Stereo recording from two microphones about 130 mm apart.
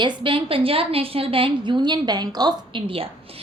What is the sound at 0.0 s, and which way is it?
A woman's voice, 40° right (ahead or behind).